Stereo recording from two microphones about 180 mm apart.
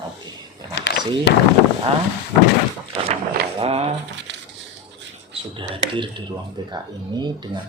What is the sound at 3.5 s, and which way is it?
Speech, 35° right (ahead or behind).